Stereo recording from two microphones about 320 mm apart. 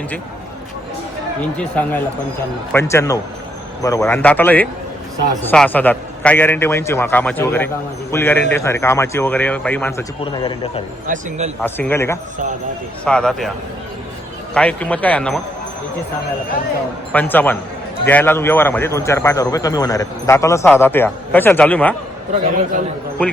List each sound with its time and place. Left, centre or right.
1.5 s a man's voice: centre
10.4 s speech: centre
11.0 s speech: right
11.6 s a man's voice: centre
14.5 s a man's voice: centre
17.1 s a man's voice: centre
23.2 s a man's voice: centre